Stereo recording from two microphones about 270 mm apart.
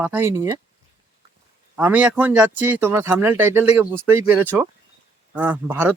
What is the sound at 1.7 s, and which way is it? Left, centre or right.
Speech, centre.